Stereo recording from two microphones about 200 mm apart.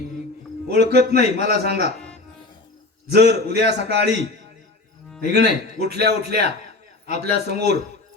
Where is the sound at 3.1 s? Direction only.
55° right (ahead or behind).